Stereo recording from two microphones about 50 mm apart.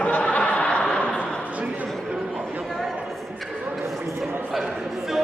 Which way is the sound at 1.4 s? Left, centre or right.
Right.